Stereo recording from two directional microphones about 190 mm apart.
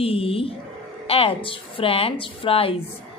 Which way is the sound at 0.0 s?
30° left (ahead or behind).